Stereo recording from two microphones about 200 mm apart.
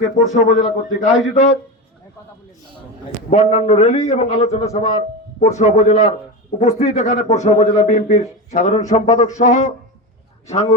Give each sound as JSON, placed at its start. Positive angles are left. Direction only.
{"t": 0.0, "sound": "a man's voice", "side_deg": 40}
{"t": 3.2, "sound": "a man's voice", "side_deg": 35}